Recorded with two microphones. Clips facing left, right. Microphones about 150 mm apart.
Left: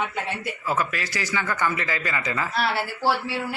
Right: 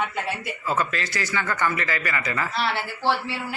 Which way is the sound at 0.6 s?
10° left (ahead or behind).